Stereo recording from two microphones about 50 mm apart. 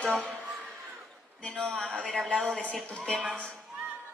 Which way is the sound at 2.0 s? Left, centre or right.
Centre.